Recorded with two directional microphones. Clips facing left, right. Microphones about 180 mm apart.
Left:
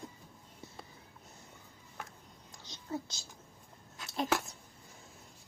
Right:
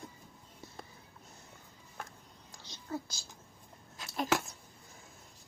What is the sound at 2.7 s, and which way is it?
Whispering, 20° left (ahead or behind).